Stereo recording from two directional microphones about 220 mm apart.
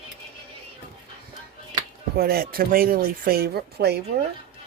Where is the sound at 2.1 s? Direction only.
45° right (ahead or behind).